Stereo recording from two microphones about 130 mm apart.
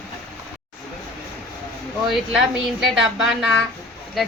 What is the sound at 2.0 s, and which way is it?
A woman's voice, centre (ahead or behind).